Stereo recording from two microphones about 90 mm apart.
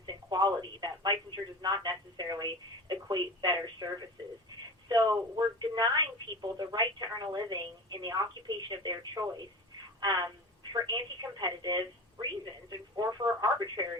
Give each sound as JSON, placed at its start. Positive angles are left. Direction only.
{"t": 0.0, "sound": "speech", "side_deg": -50}